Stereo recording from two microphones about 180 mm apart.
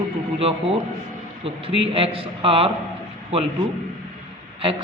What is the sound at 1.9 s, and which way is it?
Speech, 30° right (ahead or behind).